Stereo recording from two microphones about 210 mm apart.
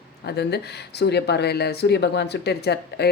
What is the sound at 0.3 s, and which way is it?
Speech, 50° left (ahead or behind).